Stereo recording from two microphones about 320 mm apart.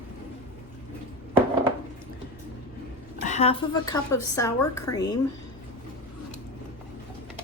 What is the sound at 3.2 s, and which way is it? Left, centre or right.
A woman's voice, left.